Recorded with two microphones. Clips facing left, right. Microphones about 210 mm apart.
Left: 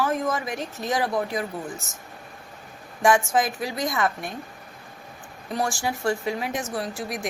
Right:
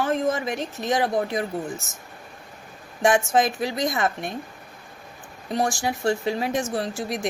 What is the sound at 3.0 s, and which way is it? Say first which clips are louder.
Speech: right 1 dB; 25° right (ahead or behind).